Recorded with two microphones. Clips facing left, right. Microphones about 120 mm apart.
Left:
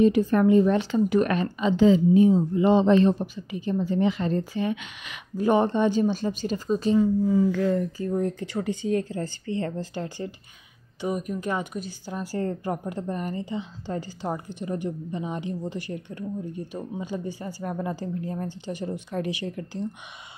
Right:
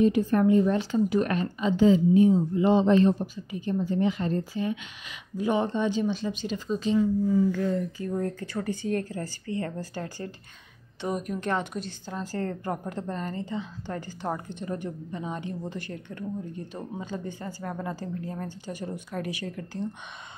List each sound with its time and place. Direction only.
0.0 s speech: 90° left; by 5.2 s 75° left (ahead or behind)
5.4 s speech: 55° left (ahead or behind)
7.2 s speech: 90° left
8.1 s a woman's voice: 20° left (ahead or behind)
11.0 s a woman's voice: 5° left (ahead or behind); by 19.8 s 20° left (ahead or behind)